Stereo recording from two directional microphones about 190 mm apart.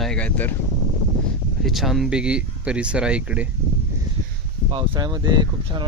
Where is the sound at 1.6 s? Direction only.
Centre (ahead or behind).